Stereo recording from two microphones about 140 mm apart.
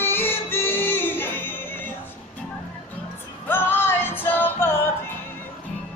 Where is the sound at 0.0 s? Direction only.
15° left (ahead or behind).